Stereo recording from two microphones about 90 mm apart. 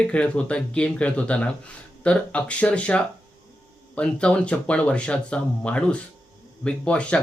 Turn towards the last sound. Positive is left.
turn(degrees=10)  # may be behind; listen again after turning